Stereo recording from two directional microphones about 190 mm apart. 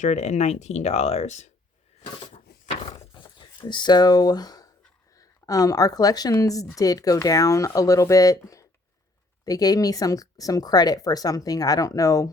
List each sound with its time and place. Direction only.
0.0 s speech: 35° left (ahead or behind)
3.3 s speech: 25° left (ahead or behind)